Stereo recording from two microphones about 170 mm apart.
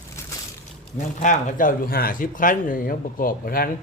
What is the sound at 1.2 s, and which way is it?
Speech, 45° left (ahead or behind).